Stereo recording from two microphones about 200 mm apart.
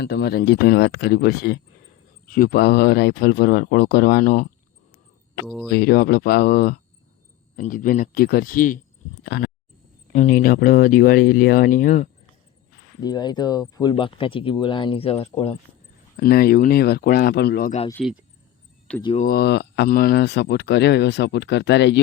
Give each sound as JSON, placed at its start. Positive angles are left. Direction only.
{"t": 0.0, "sound": "speech", "side_deg": 55}
{"t": 5.6, "sound": "speech", "side_deg": 50}
{"t": 9.2, "sound": "speech", "side_deg": 55}
{"t": 10.1, "sound": "speech", "side_deg": 35}
{"t": 13.0, "sound": "speech", "side_deg": 20}
{"t": 16.1, "sound": "speech", "side_deg": 50}
{"t": 18.0, "sound": "speech", "side_deg": 0}
{"t": 19.2, "sound": "speech", "side_deg": 50}